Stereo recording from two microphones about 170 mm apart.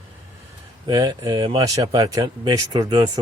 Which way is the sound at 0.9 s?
25° right (ahead or behind).